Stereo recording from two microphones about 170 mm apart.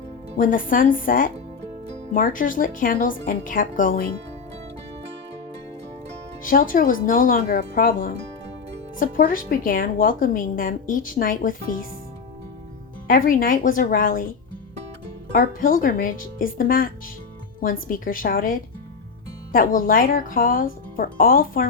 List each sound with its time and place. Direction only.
0.3 s speech: 50° left (ahead or behind)
6.4 s speech: 55° left (ahead or behind)
13.1 s speech: 55° left (ahead or behind)
15.3 s speech: 55° left (ahead or behind)